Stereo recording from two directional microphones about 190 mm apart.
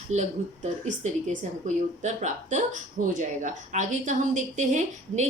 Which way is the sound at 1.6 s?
40° right (ahead or behind).